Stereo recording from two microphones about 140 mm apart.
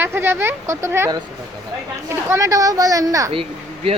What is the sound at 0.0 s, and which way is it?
Speech, 15° right (ahead or behind).